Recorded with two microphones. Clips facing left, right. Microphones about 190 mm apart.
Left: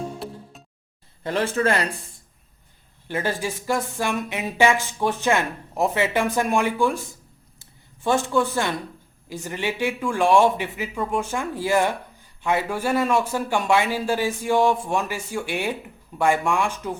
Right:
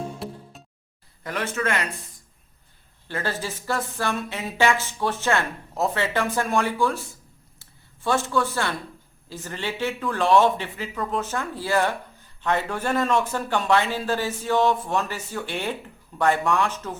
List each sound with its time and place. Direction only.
0.2 s music: centre (ahead or behind)
1.2 s speech: 30° left (ahead or behind)
3.1 s speech: 15° left (ahead or behind)
7.6 s a sound: 15° left (ahead or behind)
9.3 s speech: 15° left (ahead or behind)